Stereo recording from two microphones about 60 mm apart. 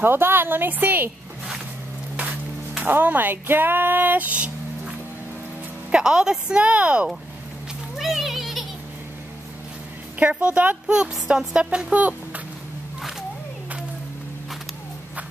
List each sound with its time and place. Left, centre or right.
0.0 s speech: right
2.8 s speech: right
5.9 s a woman's voice: centre
8.0 s children playing: centre
10.1 s a woman's voice: right
10.9 s a woman's voice: centre
12.0 s a sound: right